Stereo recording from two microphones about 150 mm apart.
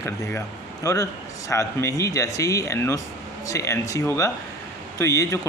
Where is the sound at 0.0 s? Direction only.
20° left (ahead or behind).